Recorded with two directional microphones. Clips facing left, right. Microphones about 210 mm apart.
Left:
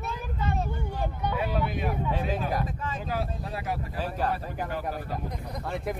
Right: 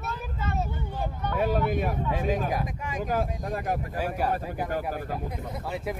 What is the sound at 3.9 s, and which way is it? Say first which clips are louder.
Speech: even; 10° right (ahead or behind).